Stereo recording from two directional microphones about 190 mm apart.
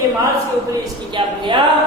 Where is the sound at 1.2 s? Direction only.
25° right (ahead or behind).